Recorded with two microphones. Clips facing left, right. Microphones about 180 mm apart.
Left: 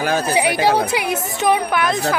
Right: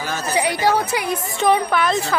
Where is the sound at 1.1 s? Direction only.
20° left (ahead or behind).